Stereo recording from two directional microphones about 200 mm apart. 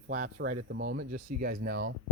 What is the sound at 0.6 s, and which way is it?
Speech, 75° right (ahead or behind).